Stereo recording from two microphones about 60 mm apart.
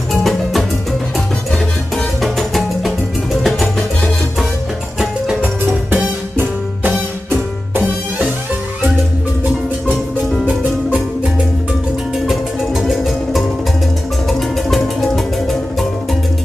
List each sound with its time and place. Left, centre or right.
0.1 s music: centre
2.2 s music: centre
5.4 s music: right
10.4 s music: right
12.3 s music: centre